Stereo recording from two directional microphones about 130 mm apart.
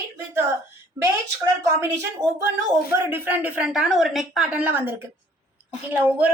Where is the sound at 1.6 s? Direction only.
25° right (ahead or behind).